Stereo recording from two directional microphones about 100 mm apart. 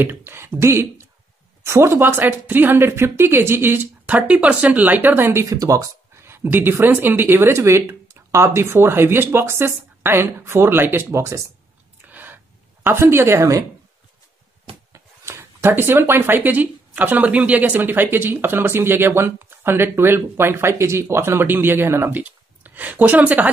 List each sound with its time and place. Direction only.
0.0 s speech: 20° right (ahead or behind)
5.4 s speech: 35° right (ahead or behind)
12.1 s a sound: 20° right (ahead or behind)
12.9 s speech: 25° right (ahead or behind)
14.9 s speech: 25° right (ahead or behind)